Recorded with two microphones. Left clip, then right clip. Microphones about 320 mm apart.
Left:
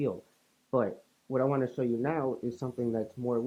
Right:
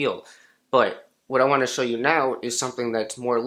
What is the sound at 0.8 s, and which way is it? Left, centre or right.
Speech, centre.